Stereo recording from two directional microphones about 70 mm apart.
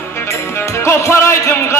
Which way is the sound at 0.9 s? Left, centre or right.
Left.